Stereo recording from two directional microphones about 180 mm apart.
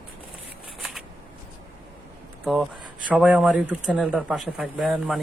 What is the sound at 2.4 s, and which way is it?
Speech, centre (ahead or behind).